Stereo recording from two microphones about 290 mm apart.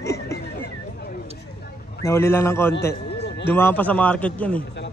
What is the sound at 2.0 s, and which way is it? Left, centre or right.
A man's voice, centre.